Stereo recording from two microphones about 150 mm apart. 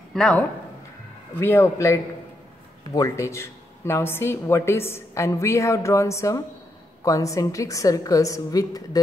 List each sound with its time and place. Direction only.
0.1 s speech: 5° left (ahead or behind); by 9.0 s 25° left (ahead or behind)